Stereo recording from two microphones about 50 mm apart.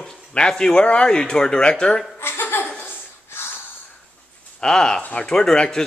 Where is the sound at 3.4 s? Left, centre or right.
Left.